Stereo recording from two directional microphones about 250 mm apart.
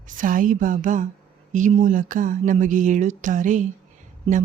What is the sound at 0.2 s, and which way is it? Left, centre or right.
Speech, right.